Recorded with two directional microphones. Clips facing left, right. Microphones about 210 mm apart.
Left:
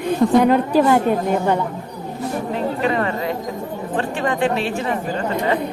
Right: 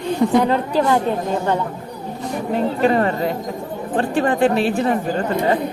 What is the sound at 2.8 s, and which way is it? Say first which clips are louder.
A woman's voice: right 5 dB; 40° right (ahead or behind).